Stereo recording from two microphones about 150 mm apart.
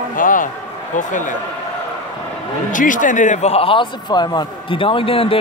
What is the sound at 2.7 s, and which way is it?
A man's voice, 60° left (ahead or behind).